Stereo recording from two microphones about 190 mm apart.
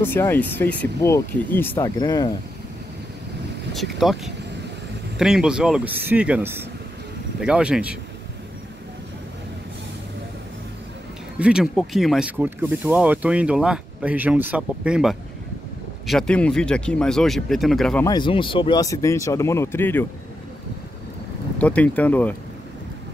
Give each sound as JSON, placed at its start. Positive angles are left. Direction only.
{"t": 0.0, "sound": "speech", "side_deg": 10}
{"t": 3.7, "sound": "speech", "side_deg": 0}
{"t": 5.2, "sound": "speech", "side_deg": -5}
{"t": 11.3, "sound": "speech", "side_deg": -5}
{"t": 18.0, "sound": "speech", "side_deg": 25}
{"t": 21.5, "sound": "speech", "side_deg": 5}